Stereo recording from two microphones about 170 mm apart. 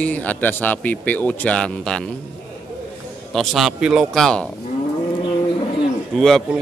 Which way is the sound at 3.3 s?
Centre (ahead or behind).